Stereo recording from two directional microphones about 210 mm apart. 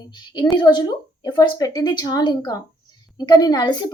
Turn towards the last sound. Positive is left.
turn(degrees=20)  # may be behind; listen again after turning